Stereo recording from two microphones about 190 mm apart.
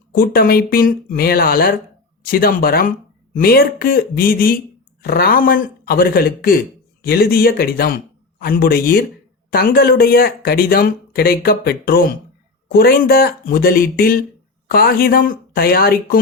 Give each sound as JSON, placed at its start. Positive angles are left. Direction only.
{"t": 0.1, "sound": "speech", "side_deg": 50}